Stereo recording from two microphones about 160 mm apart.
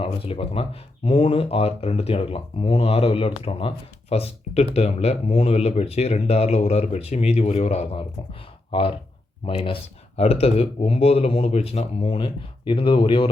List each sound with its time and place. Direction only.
0.0 s speech: 35° left (ahead or behind)